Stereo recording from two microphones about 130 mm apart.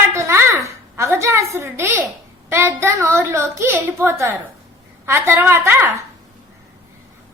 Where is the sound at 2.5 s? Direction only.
20° right (ahead or behind).